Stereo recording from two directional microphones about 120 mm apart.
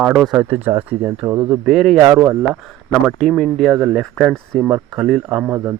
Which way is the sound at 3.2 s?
5° left (ahead or behind).